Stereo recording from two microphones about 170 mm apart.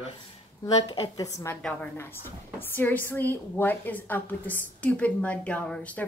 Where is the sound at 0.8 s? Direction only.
25° left (ahead or behind).